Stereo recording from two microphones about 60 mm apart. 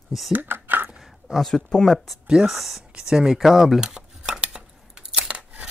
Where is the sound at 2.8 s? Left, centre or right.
Centre.